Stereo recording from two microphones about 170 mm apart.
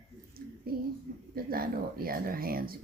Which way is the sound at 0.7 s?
60° right (ahead or behind).